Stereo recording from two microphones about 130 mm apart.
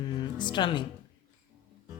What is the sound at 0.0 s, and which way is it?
Music, 35° left (ahead or behind).